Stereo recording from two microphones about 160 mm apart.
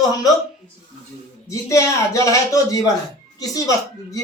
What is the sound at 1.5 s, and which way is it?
Speech, 20° left (ahead or behind).